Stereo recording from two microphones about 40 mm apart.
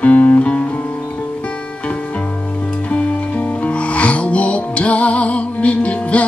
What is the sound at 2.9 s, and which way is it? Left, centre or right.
Music, left.